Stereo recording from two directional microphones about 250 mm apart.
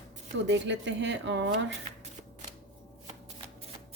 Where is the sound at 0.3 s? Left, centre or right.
Right.